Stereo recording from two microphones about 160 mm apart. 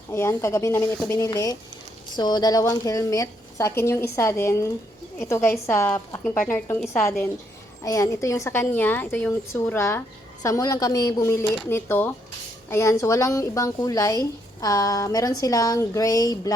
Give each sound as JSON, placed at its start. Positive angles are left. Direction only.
{"t": 0.1, "sound": "speech", "side_deg": 15}